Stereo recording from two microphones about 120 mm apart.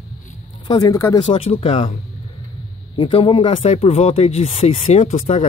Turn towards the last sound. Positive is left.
turn(degrees=60)  # may be behind; listen again after turning